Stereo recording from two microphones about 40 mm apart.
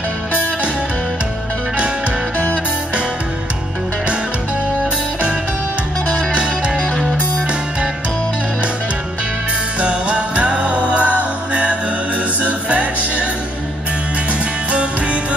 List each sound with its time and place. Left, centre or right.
9.8 s music: right
14.7 s music: right